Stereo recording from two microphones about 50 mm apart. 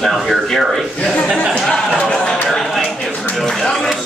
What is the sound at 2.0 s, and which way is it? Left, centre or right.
Speech, centre.